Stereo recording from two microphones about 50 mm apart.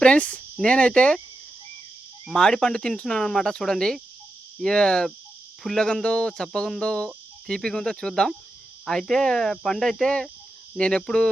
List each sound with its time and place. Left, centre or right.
0.0 s speech: left
2.2 s speech: centre